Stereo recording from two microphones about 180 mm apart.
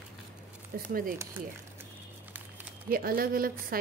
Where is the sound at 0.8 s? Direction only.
55° right (ahead or behind).